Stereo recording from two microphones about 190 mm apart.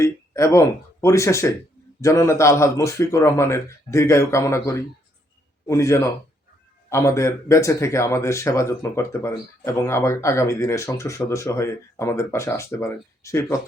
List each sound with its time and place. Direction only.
0.0 s speech: 15° left (ahead or behind)